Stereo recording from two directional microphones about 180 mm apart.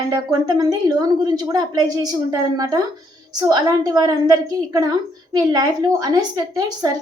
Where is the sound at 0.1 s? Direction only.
20° right (ahead or behind).